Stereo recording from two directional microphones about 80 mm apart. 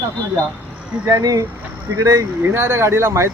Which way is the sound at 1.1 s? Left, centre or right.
Right.